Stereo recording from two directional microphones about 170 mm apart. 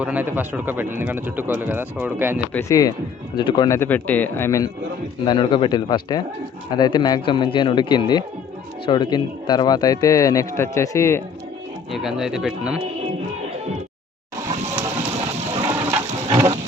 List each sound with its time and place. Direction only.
0.0 s speech: 10° right (ahead or behind)
2.5 s speech: 15° left (ahead or behind)
3.8 s speech: 10° left (ahead or behind)
5.2 s speech: 25° left (ahead or behind)
11.9 s speech: centre (ahead or behind)
15.6 s water: 15° right (ahead or behind)